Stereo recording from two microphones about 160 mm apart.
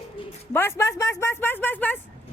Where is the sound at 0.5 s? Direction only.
15° left (ahead or behind).